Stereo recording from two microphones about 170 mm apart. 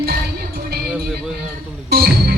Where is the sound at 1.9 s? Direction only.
65° right (ahead or behind).